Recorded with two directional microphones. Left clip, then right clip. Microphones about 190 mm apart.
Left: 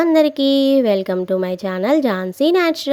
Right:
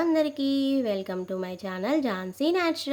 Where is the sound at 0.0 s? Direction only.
45° left (ahead or behind).